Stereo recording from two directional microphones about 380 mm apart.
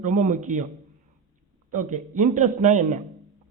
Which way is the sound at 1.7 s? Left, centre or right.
Centre.